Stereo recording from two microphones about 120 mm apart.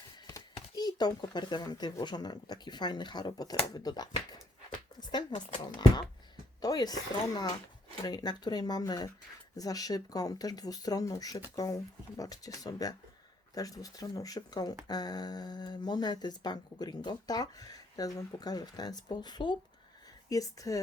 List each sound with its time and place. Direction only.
0.3 s speech: 30° left (ahead or behind)
5.3 s speech: 35° left (ahead or behind)
6.6 s speech: 35° left (ahead or behind)